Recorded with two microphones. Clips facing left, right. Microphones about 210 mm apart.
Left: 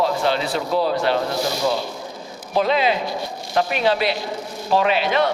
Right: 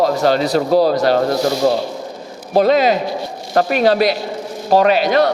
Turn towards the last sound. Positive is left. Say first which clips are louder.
# right 6 dB
turn(degrees=-40)  # may be behind; listen again after turning